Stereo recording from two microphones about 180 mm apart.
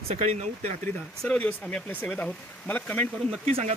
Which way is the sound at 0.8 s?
10° left (ahead or behind).